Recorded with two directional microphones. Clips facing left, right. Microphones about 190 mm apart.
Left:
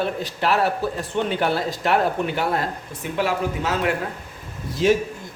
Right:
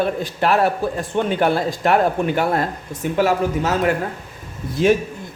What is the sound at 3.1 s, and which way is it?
Speech, 45° right (ahead or behind).